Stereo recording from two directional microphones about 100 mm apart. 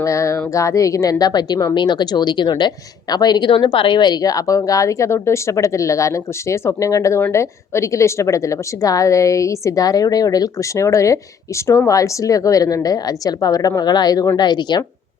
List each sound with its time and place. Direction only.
0.0 s a woman's voice: 30° left (ahead or behind)
3.5 s a woman's voice: 55° left (ahead or behind)